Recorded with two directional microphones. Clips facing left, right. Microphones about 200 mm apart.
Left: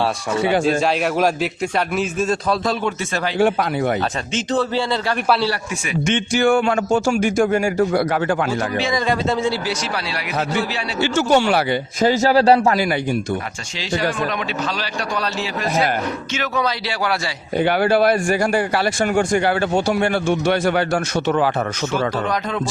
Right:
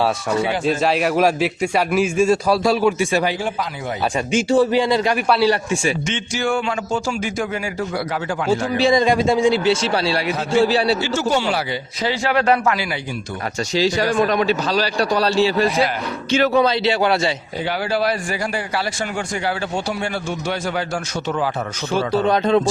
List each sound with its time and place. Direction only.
0.8 s speech: centre (ahead or behind)
3.3 s a man's voice: 65° left (ahead or behind)
4.3 s speech: 10° right (ahead or behind)
5.5 s a man's voice: 25° right (ahead or behind)
6.1 s speech: 55° left (ahead or behind)
8.8 s a man's voice: 30° right (ahead or behind)
9.0 s speech: 15° right (ahead or behind)
9.8 s a man's voice: 30° right (ahead or behind)
11.0 s a man's voice: 60° left (ahead or behind)
12.2 s a man's voice: 35° left (ahead or behind)
13.7 s a man's voice: 40° right (ahead or behind); by 17.3 s 25° right (ahead or behind)
17.6 s a man's voice: 60° left (ahead or behind)
21.9 s a man's voice: 30° right (ahead or behind)